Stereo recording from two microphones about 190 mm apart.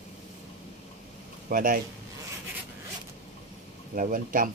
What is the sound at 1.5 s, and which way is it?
Speech, 45° right (ahead or behind).